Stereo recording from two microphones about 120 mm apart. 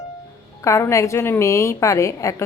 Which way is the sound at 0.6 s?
25° left (ahead or behind).